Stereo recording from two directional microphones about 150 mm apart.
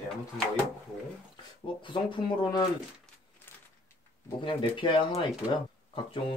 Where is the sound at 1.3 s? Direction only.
30° left (ahead or behind).